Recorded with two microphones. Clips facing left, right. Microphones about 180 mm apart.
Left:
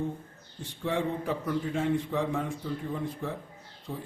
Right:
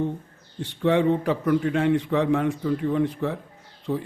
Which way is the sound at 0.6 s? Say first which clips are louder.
Right 10 dB; 75° right (ahead or behind).